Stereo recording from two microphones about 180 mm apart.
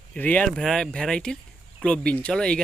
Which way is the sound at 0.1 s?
10° left (ahead or behind).